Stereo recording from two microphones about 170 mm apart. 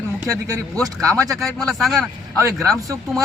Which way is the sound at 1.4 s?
Centre (ahead or behind).